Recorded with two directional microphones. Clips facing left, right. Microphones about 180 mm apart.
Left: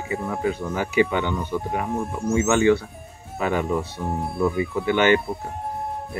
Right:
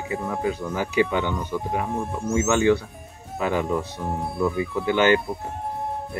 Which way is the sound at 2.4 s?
10° left (ahead or behind).